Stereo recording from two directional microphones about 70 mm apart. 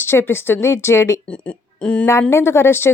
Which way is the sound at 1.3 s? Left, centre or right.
Centre.